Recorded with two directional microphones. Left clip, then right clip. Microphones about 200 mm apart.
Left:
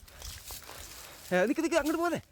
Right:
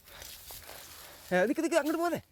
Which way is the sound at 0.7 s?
15° right (ahead or behind).